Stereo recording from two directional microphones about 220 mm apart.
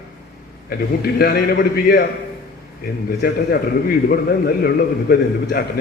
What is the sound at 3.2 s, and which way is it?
A man's voice, 45° left (ahead or behind).